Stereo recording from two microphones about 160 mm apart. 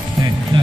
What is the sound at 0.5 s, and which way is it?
Music, 30° right (ahead or behind).